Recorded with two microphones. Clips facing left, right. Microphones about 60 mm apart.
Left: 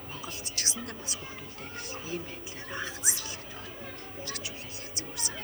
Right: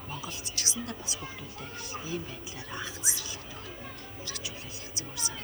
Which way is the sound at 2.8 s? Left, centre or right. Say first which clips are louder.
Left 1 dB; left.